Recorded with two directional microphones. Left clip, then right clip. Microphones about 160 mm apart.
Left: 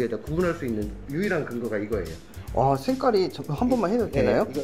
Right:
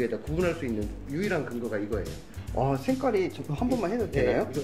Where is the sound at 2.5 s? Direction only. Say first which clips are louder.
Left 5 dB; 30° left (ahead or behind).